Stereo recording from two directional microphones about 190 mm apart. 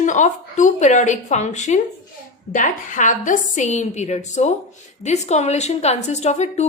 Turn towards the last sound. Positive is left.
turn(degrees=35)  # may be behind; listen again after turning